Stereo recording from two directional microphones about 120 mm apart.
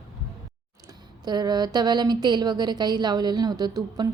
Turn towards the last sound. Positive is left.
turn(degrees=-35)  # may be behind; listen again after turning